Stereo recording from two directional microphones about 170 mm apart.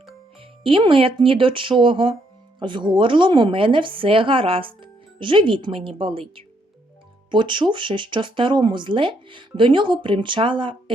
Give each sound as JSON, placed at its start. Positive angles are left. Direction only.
{"t": 0.6, "sound": "speech", "side_deg": -30}